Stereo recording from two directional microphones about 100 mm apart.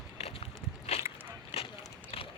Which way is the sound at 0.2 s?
80° left.